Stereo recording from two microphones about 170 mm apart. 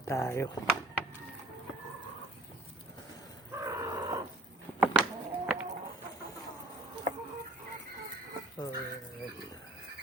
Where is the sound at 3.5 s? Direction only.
20° right (ahead or behind).